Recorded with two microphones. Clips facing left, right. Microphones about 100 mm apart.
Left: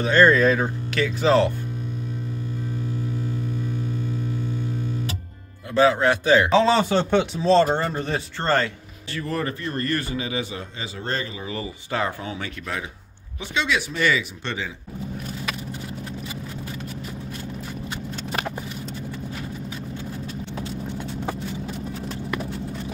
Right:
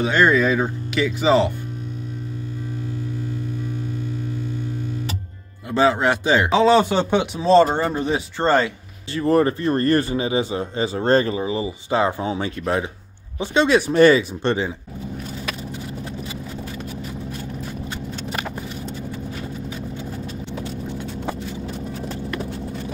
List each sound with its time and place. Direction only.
0.0 s a man's voice: 15° right (ahead or behind)
5.7 s speech: 25° right (ahead or behind)
6.5 s a man's voice: 5° right (ahead or behind)
9.1 s speech: 30° right (ahead or behind)
11.4 s speech: 20° right (ahead or behind); by 14.7 s 40° right (ahead or behind)